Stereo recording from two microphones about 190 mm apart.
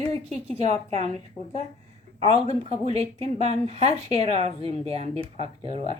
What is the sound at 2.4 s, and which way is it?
Speech, 35° right (ahead or behind).